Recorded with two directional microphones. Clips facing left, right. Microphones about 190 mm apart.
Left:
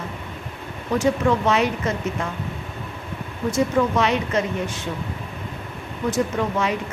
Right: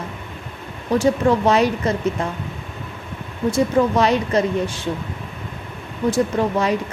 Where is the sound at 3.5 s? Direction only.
35° right (ahead or behind).